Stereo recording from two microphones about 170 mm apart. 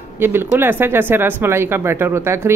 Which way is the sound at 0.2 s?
15° right (ahead or behind).